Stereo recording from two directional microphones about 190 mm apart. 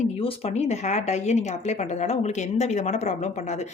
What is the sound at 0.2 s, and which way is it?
Speech, 30° left (ahead or behind).